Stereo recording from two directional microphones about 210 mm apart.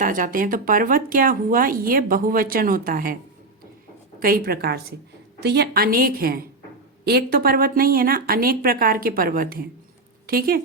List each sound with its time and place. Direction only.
0.0 s speech: 40° right (ahead or behind)
4.2 s speech: 45° right (ahead or behind)